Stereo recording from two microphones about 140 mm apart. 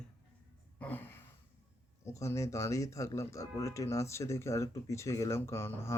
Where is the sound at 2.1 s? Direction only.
20° left (ahead or behind).